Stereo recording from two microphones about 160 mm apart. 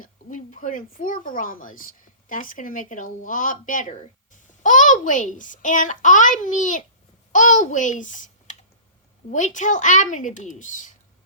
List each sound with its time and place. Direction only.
0.0 s a child's voice: 55° left (ahead or behind)